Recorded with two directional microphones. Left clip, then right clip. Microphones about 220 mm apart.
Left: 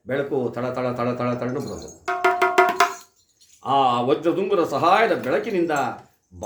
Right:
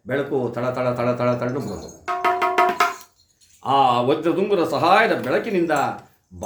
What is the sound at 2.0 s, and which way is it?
Music, 50° left (ahead or behind).